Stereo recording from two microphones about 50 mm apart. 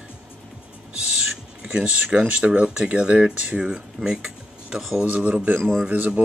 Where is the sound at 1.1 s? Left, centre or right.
Centre.